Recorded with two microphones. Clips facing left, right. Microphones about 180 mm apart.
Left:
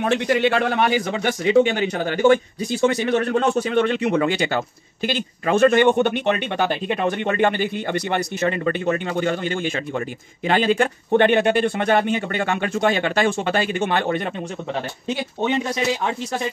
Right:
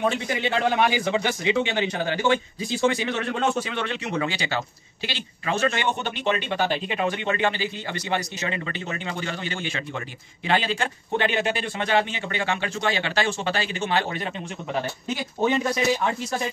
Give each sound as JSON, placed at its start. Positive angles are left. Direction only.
{"t": 0.0, "sound": "a man's voice", "side_deg": 70}